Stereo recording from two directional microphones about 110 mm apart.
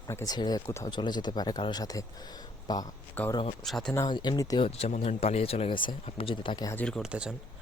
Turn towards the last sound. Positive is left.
turn(degrees=-10)  # may be behind; listen again after turning